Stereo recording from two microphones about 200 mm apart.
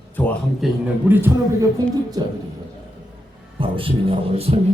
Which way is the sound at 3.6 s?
25° right (ahead or behind).